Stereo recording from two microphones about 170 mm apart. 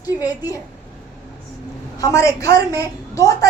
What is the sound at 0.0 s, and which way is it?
Speech, 20° left (ahead or behind).